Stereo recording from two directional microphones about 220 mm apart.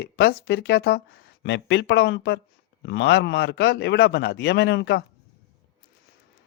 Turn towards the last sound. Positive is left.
turn(degrees=50)  # may be behind; listen again after turning